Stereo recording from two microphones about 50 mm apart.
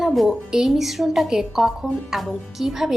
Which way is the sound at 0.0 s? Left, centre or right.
Centre.